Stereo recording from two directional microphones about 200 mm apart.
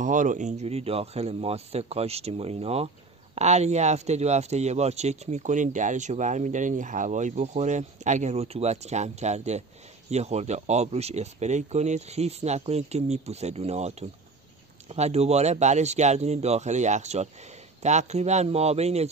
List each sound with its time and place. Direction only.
0.0 s speech: 40° right (ahead or behind)